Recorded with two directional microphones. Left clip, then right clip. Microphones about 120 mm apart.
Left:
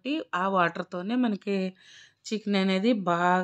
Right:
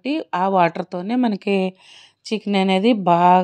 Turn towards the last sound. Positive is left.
turn(degrees=-40)  # may be behind; listen again after turning